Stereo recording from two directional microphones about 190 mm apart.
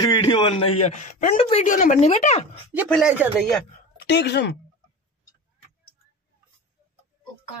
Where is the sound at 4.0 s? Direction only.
60° left (ahead or behind).